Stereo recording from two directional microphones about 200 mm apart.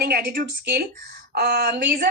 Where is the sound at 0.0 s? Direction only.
50° right (ahead or behind).